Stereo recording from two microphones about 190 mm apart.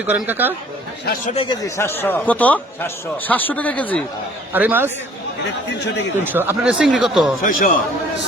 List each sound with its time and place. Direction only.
0.0 s speech: 10° right (ahead or behind)
1.3 s a man's voice: 30° left (ahead or behind)
1.6 s a man's voice: 10° left (ahead or behind)
4.5 s speech: 10° right (ahead or behind)
6.2 s speech: 10° right (ahead or behind)
7.4 s a man's voice: 50° left (ahead or behind)